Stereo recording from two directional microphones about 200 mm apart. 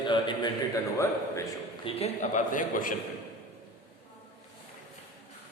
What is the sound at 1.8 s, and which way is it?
A man's voice, 35° left (ahead or behind).